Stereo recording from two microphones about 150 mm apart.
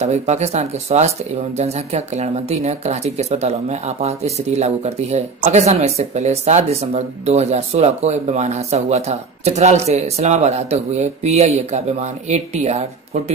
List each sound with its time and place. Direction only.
0.0 s speech: 50° right (ahead or behind)